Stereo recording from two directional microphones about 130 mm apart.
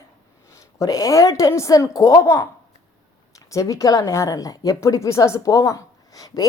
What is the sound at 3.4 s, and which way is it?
A woman's voice, 25° left (ahead or behind).